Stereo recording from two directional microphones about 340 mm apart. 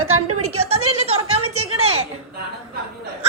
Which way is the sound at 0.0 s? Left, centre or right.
Right.